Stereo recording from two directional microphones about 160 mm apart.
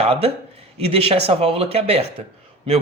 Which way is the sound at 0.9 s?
35° right (ahead or behind).